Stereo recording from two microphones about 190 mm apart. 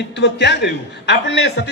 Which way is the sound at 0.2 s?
65° left (ahead or behind).